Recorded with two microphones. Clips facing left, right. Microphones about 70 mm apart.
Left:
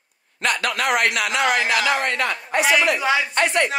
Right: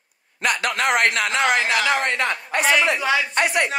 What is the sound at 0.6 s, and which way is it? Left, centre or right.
Speech, right.